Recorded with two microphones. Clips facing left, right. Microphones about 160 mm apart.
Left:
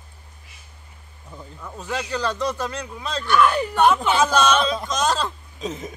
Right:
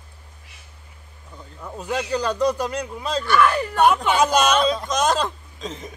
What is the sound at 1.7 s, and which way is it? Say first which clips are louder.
Speech: right 3 dB; 10° right (ahead or behind).